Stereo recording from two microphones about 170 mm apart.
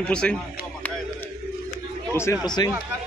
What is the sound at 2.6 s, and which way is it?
Speech, 25° left (ahead or behind).